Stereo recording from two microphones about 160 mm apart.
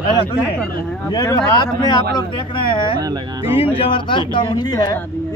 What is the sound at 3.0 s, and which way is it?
Speech, 25° right (ahead or behind).